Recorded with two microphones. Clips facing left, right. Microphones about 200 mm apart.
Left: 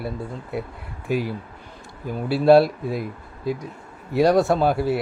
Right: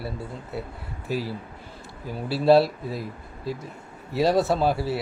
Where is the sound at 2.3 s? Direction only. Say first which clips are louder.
Left 3 dB; centre (ahead or behind).